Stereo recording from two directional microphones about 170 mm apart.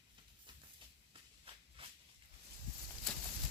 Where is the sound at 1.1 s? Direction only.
30° right (ahead or behind).